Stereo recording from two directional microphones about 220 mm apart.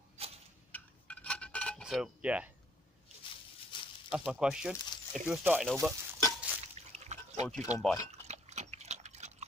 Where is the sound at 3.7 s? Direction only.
20° left (ahead or behind).